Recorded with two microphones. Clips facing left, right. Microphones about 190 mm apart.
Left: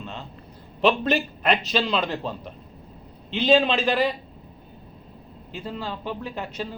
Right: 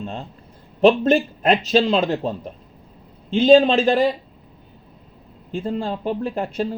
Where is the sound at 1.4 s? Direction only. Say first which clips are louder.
Right 6 dB; 40° right (ahead or behind).